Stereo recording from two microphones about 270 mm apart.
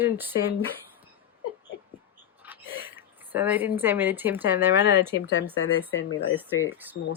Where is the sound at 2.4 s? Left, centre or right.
Centre.